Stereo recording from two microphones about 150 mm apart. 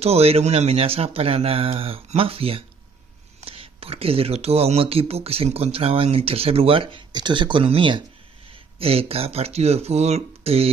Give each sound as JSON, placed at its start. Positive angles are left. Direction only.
{"t": 0.0, "sound": "speech", "side_deg": -45}